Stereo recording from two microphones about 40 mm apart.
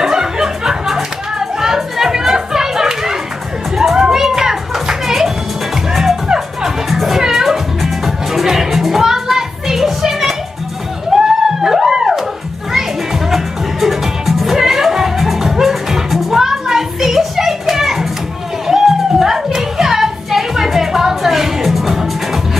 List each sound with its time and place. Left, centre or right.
0.0 s music: centre
3.9 s children playing: centre
6.2 s music: centre
6.9 s music: centre
11.1 s a sound: centre
12.7 s music: centre